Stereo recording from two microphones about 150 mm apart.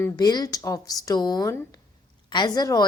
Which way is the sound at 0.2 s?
25° left (ahead or behind).